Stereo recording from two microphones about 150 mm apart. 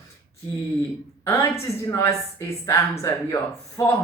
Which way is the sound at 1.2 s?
15° left (ahead or behind).